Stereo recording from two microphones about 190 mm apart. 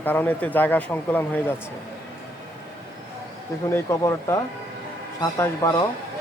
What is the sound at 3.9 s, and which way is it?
Speech, 15° left (ahead or behind).